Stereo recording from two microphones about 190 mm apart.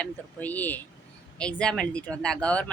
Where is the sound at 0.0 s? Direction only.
10° left (ahead or behind).